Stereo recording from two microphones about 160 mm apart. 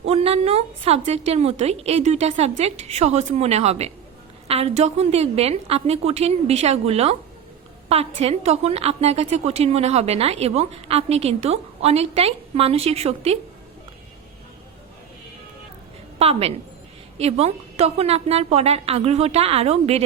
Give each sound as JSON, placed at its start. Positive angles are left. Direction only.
{"t": 0.0, "sound": "a woman's voice", "side_deg": -40}
{"t": 16.1, "sound": "a woman's voice", "side_deg": -40}